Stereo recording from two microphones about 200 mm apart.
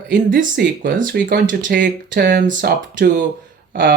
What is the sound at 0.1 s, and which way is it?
Speech, 45° right (ahead or behind).